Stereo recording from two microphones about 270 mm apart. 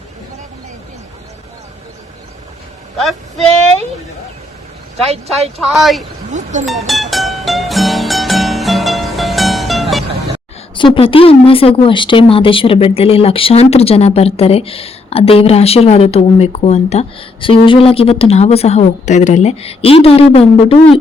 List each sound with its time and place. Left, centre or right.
3.0 s speech: centre
5.5 s speech: centre
6.3 s music: right
6.7 s music: centre
10.8 s a woman's voice: centre